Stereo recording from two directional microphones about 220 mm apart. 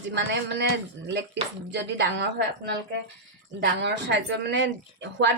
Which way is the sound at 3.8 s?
50° right (ahead or behind).